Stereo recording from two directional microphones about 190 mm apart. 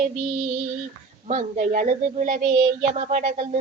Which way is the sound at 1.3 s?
40° right (ahead or behind).